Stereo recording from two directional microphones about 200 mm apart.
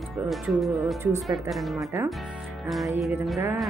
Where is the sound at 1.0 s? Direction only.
15° right (ahead or behind).